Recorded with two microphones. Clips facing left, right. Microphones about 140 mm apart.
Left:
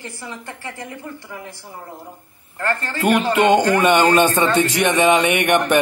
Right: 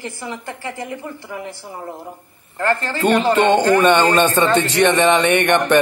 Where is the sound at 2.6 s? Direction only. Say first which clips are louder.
Right 4 dB; 15° right (ahead or behind).